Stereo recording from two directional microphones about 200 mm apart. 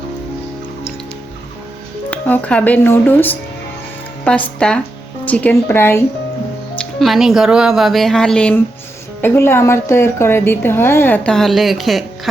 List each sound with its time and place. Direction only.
2.0 s a woman's voice: 5° left (ahead or behind)
7.0 s a woman's voice: centre (ahead or behind)